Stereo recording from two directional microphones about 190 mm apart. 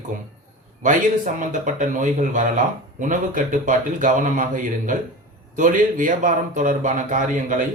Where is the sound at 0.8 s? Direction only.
40° right (ahead or behind).